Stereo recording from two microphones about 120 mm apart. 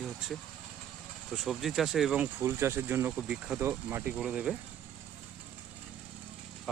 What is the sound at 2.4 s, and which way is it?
Speech, 20° right (ahead or behind).